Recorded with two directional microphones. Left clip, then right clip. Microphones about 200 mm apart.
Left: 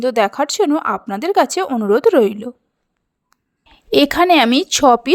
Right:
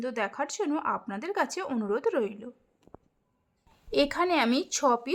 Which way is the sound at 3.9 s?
40° left (ahead or behind).